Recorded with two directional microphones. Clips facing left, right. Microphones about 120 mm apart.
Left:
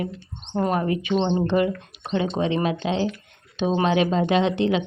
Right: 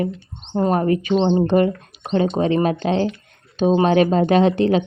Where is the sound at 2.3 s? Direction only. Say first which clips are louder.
Right 5 dB; 45° right (ahead or behind).